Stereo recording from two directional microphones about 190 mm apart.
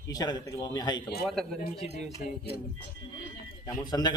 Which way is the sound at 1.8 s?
35° left (ahead or behind).